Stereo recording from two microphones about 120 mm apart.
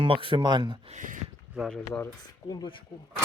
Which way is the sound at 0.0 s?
45° right (ahead or behind).